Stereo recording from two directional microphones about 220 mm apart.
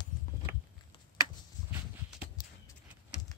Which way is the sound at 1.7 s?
10° right (ahead or behind).